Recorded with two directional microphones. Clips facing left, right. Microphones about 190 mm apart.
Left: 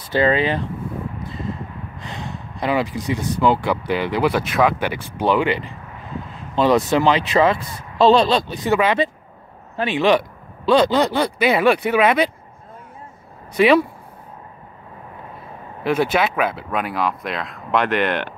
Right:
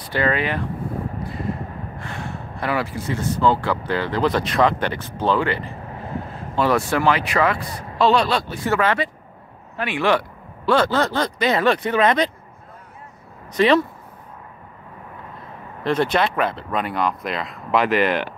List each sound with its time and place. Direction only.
0.1 s speech: 25° left (ahead or behind)
2.0 s speech: 20° left (ahead or behind)
13.6 s speech: 10° left (ahead or behind)
15.8 s speech: 5° left (ahead or behind)